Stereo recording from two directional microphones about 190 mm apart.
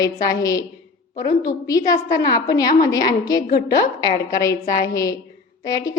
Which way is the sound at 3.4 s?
55° left (ahead or behind).